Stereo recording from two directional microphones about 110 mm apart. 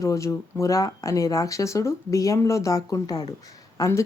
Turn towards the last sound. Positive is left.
turn(degrees=30)  # may be behind; listen again after turning